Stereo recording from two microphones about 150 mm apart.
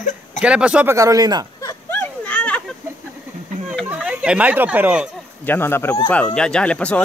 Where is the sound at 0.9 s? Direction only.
20° right (ahead or behind).